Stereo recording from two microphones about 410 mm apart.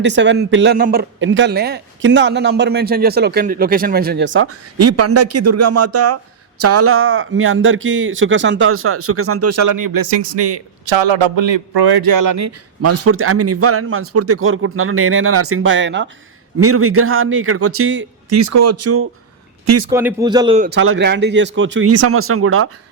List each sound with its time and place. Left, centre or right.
0.0 s a man's voice: right
10.1 s a man's voice: right
18.3 s a man's voice: right
19.9 s a man's voice: centre; by 22.7 s right